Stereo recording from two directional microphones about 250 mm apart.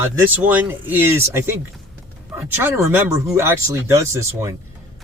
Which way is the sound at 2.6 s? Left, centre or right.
Centre.